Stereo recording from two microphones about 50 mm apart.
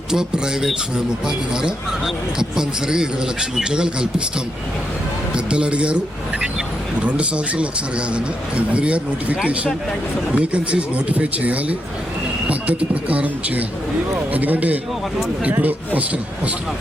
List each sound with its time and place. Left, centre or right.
0.1 s speech: centre
2.0 s speech: centre
5.5 s a man's voice: right
7.0 s a man's voice: right